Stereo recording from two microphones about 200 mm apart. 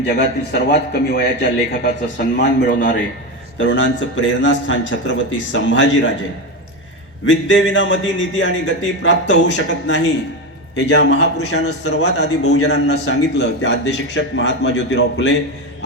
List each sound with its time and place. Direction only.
0.1 s a man's voice: 55° left (ahead or behind)
3.6 s a man's voice: 70° left (ahead or behind)
7.3 s a man's voice: 70° left (ahead or behind)